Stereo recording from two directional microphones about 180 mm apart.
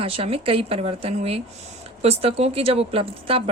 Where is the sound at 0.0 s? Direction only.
30° right (ahead or behind).